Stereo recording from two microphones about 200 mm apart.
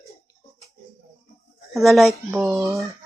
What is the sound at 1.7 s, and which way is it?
Speech, centre (ahead or behind).